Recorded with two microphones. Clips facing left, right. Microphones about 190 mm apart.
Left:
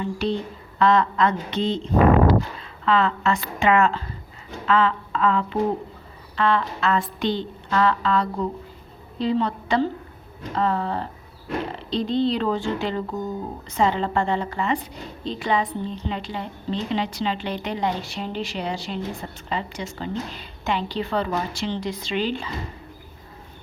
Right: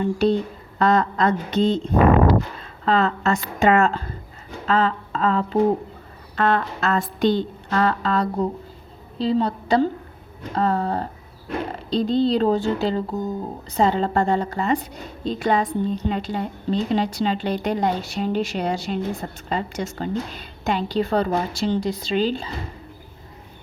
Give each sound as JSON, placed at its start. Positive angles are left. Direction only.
{"t": 0.0, "sound": "a woman's voice", "side_deg": -45}
{"t": 2.8, "sound": "a woman's voice", "side_deg": -40}